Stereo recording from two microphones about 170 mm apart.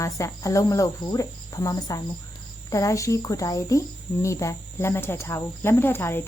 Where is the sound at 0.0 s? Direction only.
20° left (ahead or behind).